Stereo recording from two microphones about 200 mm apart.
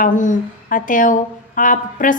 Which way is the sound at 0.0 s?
40° left (ahead or behind).